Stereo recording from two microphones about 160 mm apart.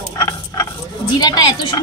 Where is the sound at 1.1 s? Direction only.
25° left (ahead or behind).